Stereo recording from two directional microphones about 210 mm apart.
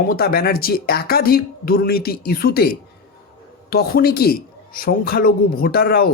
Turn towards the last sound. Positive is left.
turn(degrees=45)  # may be behind; listen again after turning